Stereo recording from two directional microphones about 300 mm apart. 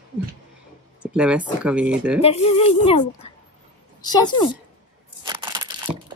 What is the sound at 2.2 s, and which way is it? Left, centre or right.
Speech, left.